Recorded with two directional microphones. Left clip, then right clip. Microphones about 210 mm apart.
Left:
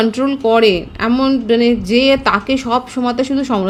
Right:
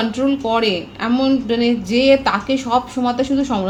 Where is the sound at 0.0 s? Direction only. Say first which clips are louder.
Left 4 dB; 50° left (ahead or behind).